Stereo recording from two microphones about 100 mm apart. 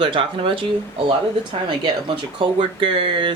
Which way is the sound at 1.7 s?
55° right (ahead or behind).